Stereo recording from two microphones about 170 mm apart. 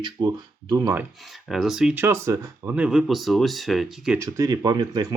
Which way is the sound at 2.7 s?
5° right (ahead or behind).